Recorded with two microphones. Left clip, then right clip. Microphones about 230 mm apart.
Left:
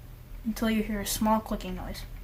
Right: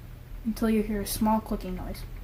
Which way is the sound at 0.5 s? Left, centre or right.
Left.